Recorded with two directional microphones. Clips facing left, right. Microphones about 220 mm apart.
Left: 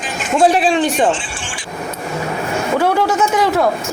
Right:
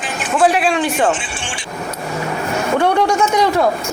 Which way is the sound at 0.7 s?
20° left (ahead or behind).